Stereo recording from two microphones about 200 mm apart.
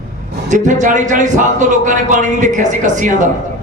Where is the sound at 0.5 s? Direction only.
40° right (ahead or behind).